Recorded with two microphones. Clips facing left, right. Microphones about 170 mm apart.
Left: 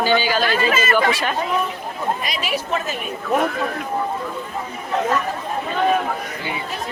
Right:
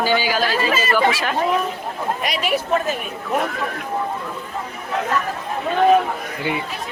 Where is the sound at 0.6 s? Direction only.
35° right (ahead or behind).